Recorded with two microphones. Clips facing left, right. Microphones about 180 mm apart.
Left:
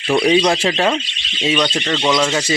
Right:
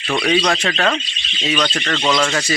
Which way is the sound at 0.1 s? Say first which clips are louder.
Left 4 dB; 20° left (ahead or behind).